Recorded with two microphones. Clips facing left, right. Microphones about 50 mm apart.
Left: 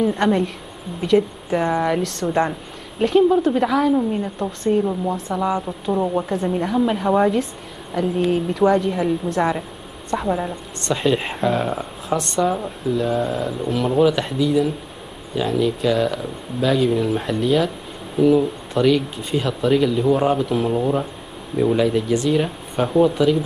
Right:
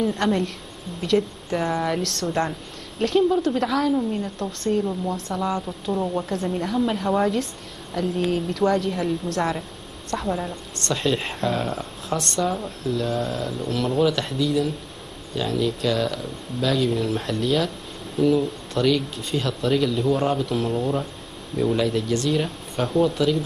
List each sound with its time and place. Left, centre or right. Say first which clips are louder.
0.2 s speech: left 4 dB; centre